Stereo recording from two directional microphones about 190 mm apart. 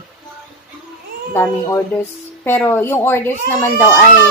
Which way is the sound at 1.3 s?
15° left (ahead or behind).